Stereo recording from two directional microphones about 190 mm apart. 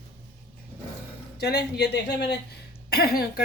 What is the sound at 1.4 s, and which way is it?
Speech, 60° left (ahead or behind).